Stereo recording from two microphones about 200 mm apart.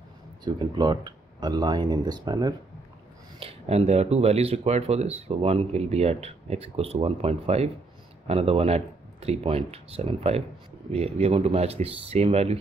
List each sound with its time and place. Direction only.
0.4 s speech: 20° right (ahead or behind)